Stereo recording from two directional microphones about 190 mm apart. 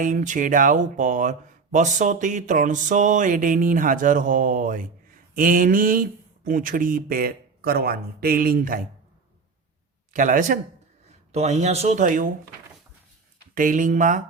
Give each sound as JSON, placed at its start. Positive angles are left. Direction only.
{"t": 0.0, "sound": "speech", "side_deg": -45}
{"t": 10.1, "sound": "speech", "side_deg": -45}
{"t": 13.5, "sound": "speech", "side_deg": -45}